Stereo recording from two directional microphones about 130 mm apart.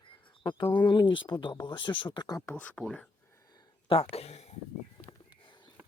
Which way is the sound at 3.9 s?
50° left (ahead or behind).